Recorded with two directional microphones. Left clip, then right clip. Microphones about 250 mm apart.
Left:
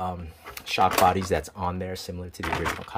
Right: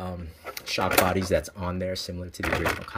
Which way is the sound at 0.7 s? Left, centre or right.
Centre.